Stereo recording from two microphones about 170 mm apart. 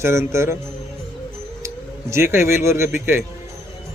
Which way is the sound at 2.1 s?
15° right (ahead or behind).